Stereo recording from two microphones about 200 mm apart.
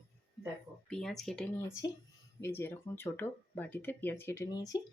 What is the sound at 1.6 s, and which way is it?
Speech, 15° left (ahead or behind).